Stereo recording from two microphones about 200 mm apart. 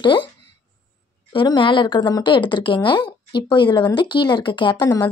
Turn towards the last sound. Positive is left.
turn(degrees=20)  # may be behind; listen again after turning